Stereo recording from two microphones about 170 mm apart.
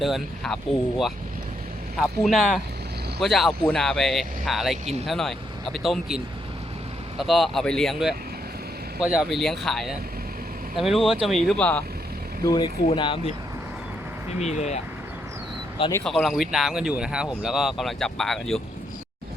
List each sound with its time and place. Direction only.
0.0 s speech: centre (ahead or behind)
12.5 s speech: 25° left (ahead or behind)
14.3 s speech: 40° left (ahead or behind)
16.0 s speech: centre (ahead or behind)